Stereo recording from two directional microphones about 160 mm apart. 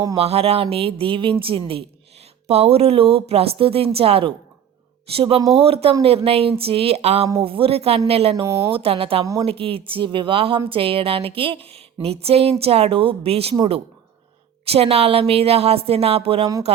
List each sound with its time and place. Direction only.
0.2 s a woman's voice: 40° right (ahead or behind)
9.2 s a woman's voice: 20° right (ahead or behind)
9.5 s a woman's voice: 35° right (ahead or behind)